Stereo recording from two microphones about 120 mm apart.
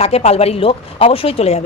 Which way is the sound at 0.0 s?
55° left (ahead or behind).